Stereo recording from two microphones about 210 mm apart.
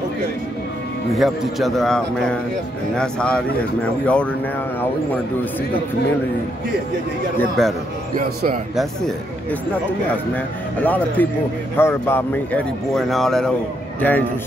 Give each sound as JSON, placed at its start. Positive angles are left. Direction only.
{"t": 1.1, "sound": "a man's voice", "side_deg": 0}
{"t": 7.3, "sound": "a man's voice", "side_deg": 0}
{"t": 8.2, "sound": "speech", "side_deg": -45}
{"t": 8.7, "sound": "a man's voice", "side_deg": 0}